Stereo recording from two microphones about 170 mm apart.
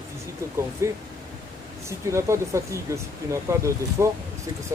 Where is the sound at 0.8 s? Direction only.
15° right (ahead or behind).